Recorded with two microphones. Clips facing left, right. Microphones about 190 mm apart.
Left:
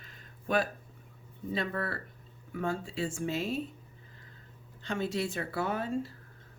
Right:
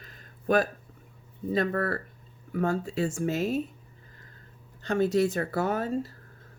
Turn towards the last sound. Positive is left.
turn(degrees=-40)  # may be behind; listen again after turning